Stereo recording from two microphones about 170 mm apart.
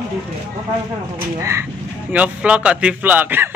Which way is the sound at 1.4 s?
15° right (ahead or behind).